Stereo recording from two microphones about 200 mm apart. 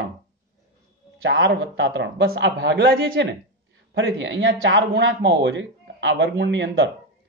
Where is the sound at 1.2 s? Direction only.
65° right (ahead or behind).